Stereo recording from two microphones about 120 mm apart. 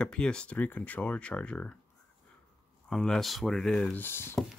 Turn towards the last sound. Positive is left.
turn(degrees=20)  # may be behind; listen again after turning